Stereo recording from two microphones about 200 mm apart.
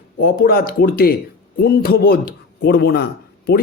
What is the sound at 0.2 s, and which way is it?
A man's voice, 50° left (ahead or behind).